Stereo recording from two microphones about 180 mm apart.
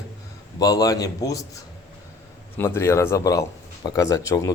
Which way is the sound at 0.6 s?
20° left (ahead or behind).